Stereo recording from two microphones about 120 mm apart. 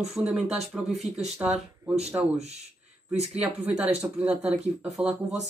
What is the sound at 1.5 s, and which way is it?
Speech, 60° right (ahead or behind).